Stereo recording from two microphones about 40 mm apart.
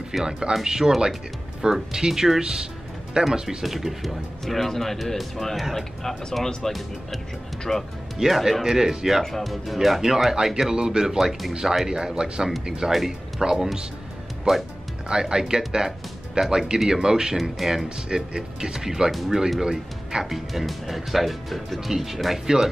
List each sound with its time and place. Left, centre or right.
0.1 s speech: centre
3.4 s speech: centre
8.3 s speech: centre
8.6 s speech: centre
9.2 s speech: centre
14.5 s speech: centre
15.0 s speech: centre
17.4 s speech: centre
17.8 s speech: right; by 19.4 s centre
19.6 s speech: centre
20.2 s speech: centre